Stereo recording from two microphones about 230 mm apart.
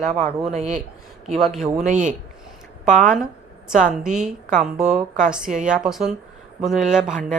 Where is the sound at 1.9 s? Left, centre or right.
Right.